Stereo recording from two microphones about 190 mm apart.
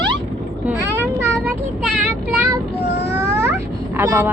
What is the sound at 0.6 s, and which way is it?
Vehicle, 10° right (ahead or behind).